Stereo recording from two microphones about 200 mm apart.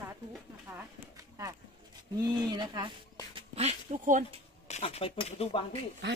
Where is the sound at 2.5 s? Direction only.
20° right (ahead or behind).